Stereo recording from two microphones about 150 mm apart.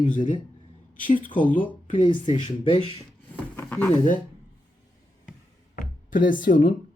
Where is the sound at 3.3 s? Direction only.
10° left (ahead or behind).